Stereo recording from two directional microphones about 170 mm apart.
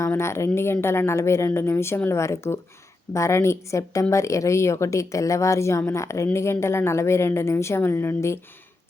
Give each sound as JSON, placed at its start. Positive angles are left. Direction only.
{"t": 0.0, "sound": "a woman's voice", "side_deg": 15}